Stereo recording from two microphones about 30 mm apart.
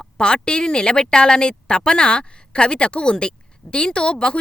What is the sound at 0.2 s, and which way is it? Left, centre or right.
A woman's voice, left.